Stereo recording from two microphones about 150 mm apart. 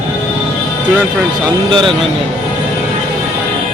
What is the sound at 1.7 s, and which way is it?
Speech, 35° right (ahead or behind).